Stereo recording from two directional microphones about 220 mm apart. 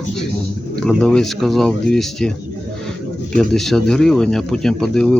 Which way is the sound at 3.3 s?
Centre (ahead or behind).